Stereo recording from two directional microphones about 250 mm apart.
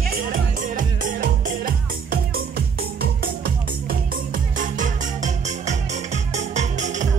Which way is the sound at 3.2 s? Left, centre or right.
Right.